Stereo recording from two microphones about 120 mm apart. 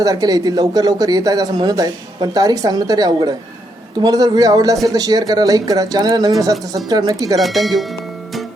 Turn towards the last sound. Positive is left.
turn(degrees=0)  # may be behind; listen again after turning